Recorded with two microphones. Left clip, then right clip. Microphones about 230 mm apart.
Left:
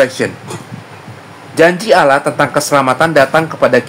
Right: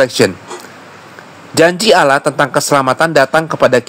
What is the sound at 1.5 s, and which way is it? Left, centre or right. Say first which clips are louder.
Speech: even; right.